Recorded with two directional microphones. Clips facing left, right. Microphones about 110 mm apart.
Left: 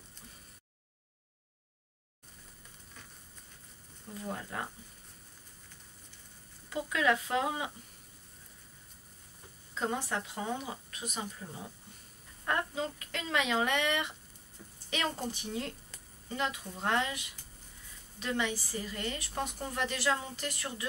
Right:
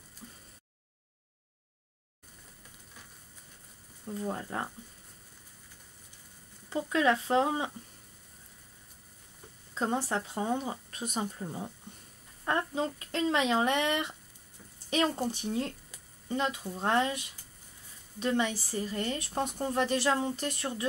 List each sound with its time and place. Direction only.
4.2 s a woman's voice: 30° right (ahead or behind)
6.7 s a woman's voice: 30° right (ahead or behind)
9.8 s a woman's voice: 30° right (ahead or behind)
12.4 s speech: 30° right (ahead or behind)
15.3 s speech: 30° right (ahead or behind)
18.2 s a woman's voice: 30° right (ahead or behind)